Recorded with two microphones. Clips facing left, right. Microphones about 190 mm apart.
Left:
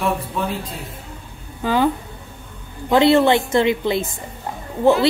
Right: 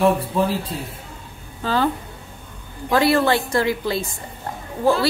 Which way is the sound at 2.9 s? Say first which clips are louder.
Left 4 dB; 25° left (ahead or behind).